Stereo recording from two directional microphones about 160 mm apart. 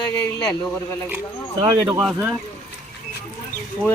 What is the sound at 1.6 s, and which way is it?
Speech, 25° right (ahead or behind).